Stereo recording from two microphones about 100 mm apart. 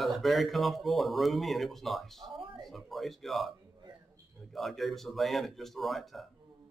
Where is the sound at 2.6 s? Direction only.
Centre (ahead or behind).